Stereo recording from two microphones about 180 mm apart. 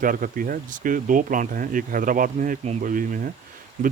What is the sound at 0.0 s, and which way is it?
Speech, 50° right (ahead or behind).